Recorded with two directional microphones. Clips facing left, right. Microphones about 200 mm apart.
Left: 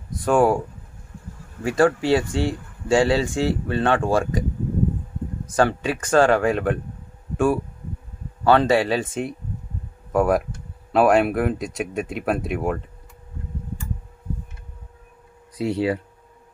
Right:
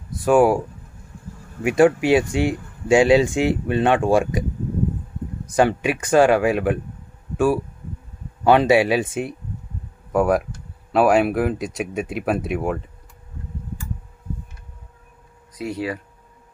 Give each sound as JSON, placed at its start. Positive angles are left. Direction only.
{"t": 0.2, "sound": "speech", "side_deg": -5}
{"t": 1.6, "sound": "speech", "side_deg": -15}
{"t": 5.6, "sound": "speech", "side_deg": -15}
{"t": 15.5, "sound": "speech", "side_deg": 30}